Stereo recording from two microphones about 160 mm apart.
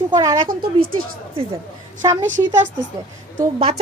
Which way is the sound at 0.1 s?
25° right (ahead or behind).